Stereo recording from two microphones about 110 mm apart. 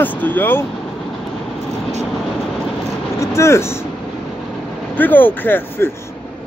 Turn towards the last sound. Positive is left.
turn(degrees=20)  # may be behind; listen again after turning